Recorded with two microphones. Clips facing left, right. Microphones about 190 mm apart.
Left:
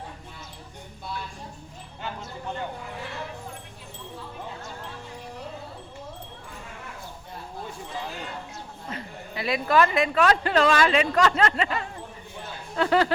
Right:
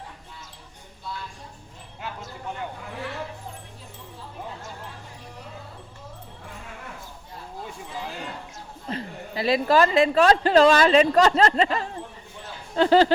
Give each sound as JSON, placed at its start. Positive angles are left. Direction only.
{"t": 8.9, "sound": "a woman's voice", "side_deg": -30}